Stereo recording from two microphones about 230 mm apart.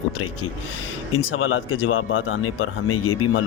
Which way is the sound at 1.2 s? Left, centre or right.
Left.